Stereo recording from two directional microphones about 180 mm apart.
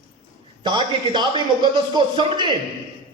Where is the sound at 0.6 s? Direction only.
25° right (ahead or behind).